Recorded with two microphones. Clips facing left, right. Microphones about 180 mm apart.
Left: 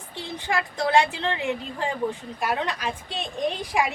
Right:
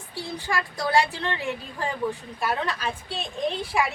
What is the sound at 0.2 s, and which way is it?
A woman's voice, 20° left (ahead or behind).